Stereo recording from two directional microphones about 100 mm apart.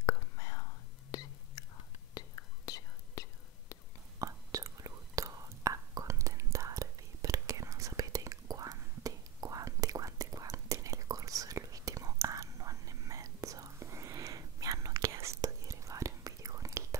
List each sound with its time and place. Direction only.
0.0 s whispering: 35° left (ahead or behind)
4.2 s whispering: 35° right (ahead or behind)